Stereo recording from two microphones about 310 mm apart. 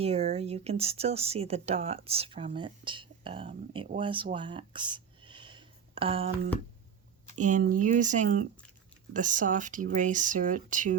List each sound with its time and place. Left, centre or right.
0.0 s speech: right
7.3 s speech: right